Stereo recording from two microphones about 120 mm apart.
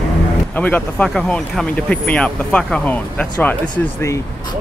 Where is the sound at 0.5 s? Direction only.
15° left (ahead or behind).